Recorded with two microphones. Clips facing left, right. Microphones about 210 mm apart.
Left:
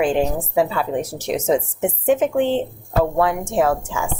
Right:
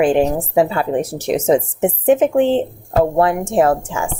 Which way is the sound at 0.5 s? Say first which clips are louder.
Right 3 dB; 55° right (ahead or behind).